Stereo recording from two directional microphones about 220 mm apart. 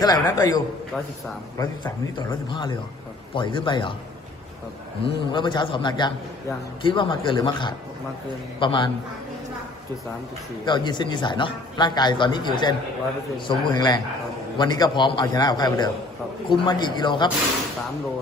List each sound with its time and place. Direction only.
0.0 s a man's voice: 15° left (ahead or behind)
5.0 s a man's voice: 20° left (ahead or behind)
10.7 s a man's voice: 20° left (ahead or behind)